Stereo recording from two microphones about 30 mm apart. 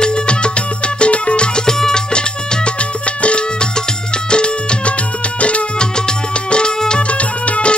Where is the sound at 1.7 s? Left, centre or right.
Centre.